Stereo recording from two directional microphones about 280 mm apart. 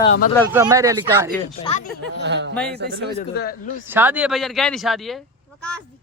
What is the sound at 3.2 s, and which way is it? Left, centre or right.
Speech, left.